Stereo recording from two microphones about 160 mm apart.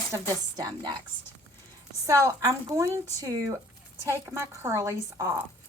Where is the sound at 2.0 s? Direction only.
20° right (ahead or behind).